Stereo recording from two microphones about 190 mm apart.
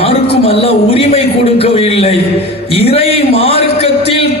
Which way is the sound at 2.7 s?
30° left (ahead or behind).